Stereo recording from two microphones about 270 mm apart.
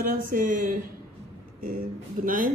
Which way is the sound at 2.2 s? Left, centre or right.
Right.